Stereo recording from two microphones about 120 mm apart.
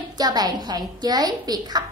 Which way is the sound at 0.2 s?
35° right (ahead or behind).